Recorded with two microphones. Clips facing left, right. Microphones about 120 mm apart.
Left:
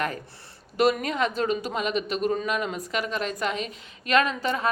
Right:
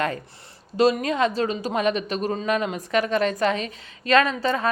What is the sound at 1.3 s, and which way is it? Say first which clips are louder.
A woman's voice: right 2 dB; 35° right (ahead or behind).